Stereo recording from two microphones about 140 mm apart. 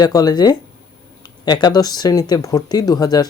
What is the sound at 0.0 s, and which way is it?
Speech, 30° left (ahead or behind).